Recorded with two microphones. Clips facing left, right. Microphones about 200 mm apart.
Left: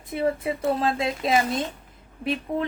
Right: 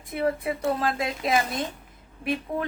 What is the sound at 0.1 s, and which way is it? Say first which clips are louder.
A woman's voice: left 1 dB; 25° left (ahead or behind).